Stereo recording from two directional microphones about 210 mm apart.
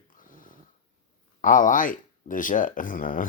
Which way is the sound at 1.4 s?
40° left (ahead or behind).